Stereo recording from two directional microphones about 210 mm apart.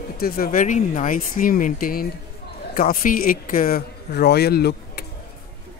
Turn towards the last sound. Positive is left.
turn(degrees=50)  # may be behind; listen again after turning